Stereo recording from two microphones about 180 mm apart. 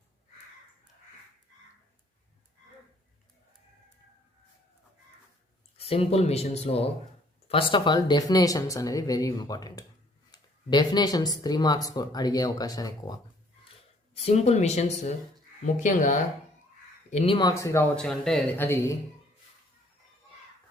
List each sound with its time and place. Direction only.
5.7 s speech: 35° left (ahead or behind)
14.1 s speech: 35° left (ahead or behind)
17.5 s speech: 15° left (ahead or behind)
17.9 s speech: 5° left (ahead or behind)